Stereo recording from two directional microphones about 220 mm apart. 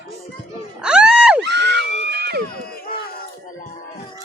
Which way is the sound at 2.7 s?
40° left (ahead or behind).